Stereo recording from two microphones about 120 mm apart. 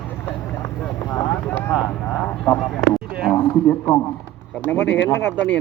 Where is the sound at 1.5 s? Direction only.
20° left (ahead or behind).